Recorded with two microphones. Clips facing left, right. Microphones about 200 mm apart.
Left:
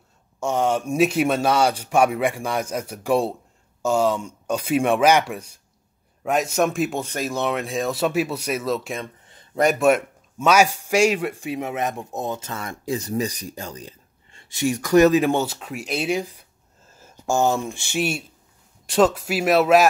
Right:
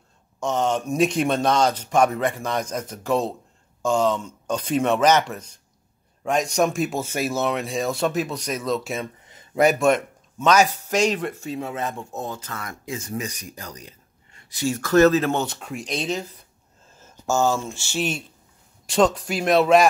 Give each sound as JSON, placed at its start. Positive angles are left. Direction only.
{"t": 0.4, "sound": "speech", "side_deg": 10}
{"t": 9.8, "sound": "speech", "side_deg": 10}